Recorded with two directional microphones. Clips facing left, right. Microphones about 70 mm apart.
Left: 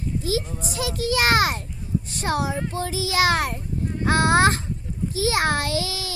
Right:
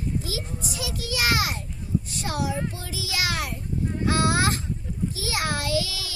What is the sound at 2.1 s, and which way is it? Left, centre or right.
Child singing, left.